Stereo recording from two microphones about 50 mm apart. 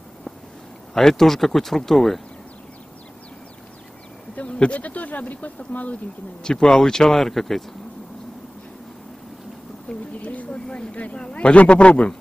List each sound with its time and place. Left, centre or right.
0.9 s speech: centre
4.5 s a sound: left
4.7 s speech: left
6.4 s speech: centre
9.8 s speech: left